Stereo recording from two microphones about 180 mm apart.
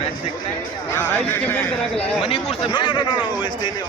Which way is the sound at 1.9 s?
30° left (ahead or behind).